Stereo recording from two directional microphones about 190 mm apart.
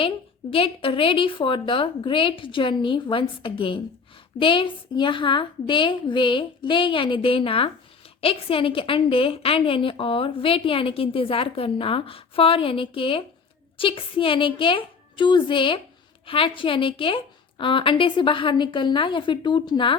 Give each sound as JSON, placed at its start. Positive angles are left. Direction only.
{"t": 0.5, "sound": "a woman's voice", "side_deg": 30}